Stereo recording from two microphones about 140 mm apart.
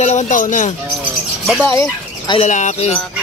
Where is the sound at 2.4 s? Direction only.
60° left (ahead or behind).